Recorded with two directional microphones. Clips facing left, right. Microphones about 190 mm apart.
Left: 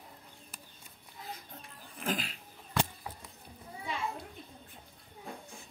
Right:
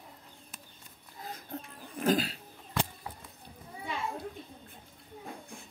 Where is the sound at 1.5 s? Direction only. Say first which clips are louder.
Right 9 dB; 40° right (ahead or behind).